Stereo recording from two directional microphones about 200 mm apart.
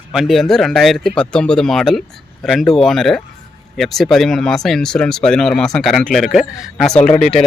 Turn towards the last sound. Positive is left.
turn(degrees=35)  # may be behind; listen again after turning